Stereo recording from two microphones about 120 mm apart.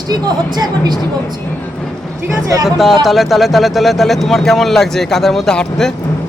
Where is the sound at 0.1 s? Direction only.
35° right (ahead or behind).